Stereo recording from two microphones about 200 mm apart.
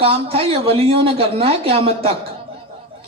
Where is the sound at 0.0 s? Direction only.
30° right (ahead or behind).